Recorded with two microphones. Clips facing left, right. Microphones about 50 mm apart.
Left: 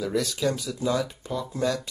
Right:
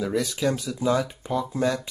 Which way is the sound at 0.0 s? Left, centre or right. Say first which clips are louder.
Right 1 dB; centre.